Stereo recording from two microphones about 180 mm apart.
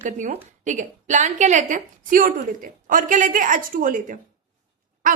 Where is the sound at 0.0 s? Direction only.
35° right (ahead or behind).